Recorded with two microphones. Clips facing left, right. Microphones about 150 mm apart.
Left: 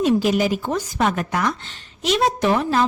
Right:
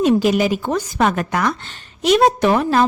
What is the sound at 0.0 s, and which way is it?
A woman's voice, 70° right (ahead or behind).